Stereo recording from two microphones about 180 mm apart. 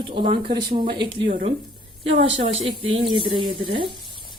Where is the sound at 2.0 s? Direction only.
35° right (ahead or behind).